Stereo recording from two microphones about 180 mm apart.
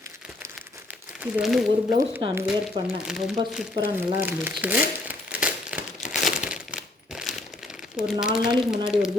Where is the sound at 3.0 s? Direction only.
Centre (ahead or behind).